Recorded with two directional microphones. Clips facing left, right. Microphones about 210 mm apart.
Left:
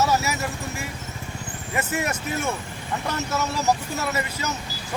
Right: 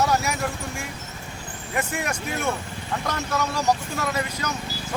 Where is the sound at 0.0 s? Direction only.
5° left (ahead or behind).